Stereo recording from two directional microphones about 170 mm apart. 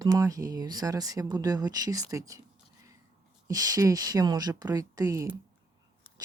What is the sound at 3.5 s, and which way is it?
Speech, 20° right (ahead or behind).